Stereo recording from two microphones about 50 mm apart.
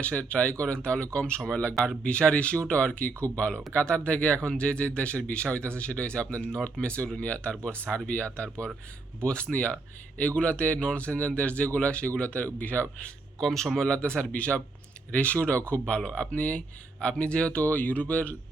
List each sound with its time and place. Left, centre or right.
0.0 s speech: left
13.4 s a man's voice: centre
13.9 s speech: left
17.6 s speech: left